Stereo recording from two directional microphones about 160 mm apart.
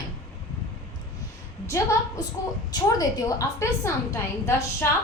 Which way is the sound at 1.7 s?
20° left (ahead or behind).